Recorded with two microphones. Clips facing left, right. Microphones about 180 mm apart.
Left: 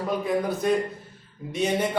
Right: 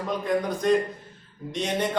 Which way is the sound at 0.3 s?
5° left (ahead or behind).